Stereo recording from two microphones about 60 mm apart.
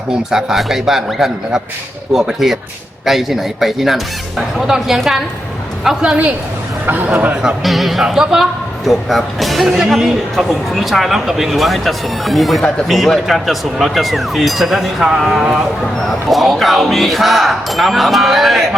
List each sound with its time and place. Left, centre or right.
0.1 s a man's voice: centre
6.8 s a man's voice: right
7.6 s a man's voice: centre